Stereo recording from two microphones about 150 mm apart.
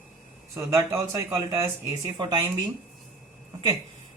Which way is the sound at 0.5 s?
20° right (ahead or behind).